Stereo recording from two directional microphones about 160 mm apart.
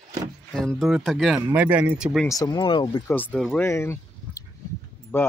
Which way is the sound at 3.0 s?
10° left (ahead or behind).